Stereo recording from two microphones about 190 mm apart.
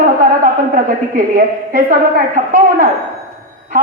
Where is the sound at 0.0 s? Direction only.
45° right (ahead or behind).